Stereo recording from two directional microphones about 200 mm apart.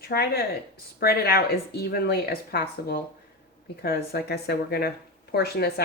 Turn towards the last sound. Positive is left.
turn(degrees=50)  # may be behind; listen again after turning